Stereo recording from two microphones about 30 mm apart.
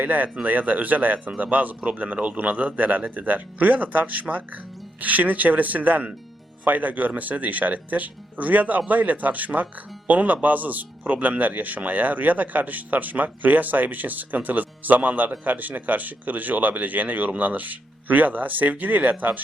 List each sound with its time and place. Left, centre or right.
0.0 s speech: right
0.4 s speech: right
2.0 s speech: right